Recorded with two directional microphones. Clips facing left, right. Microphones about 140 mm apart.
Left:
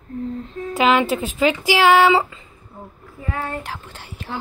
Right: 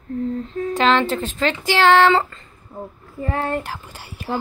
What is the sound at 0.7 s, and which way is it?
A woman's voice, 10° left (ahead or behind).